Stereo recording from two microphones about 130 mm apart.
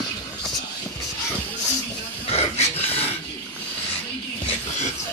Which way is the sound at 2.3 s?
50° left (ahead or behind).